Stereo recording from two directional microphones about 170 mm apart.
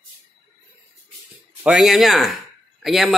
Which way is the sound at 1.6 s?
Centre (ahead or behind).